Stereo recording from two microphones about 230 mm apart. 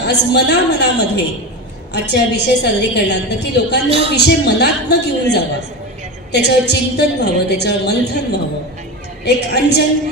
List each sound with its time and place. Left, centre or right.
0.0 s a woman's voice: left
3.8 s speech: right
4.1 s a woman's voice: left